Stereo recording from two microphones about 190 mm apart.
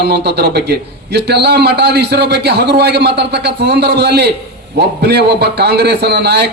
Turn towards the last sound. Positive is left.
turn(degrees=-60)  # may be behind; listen again after turning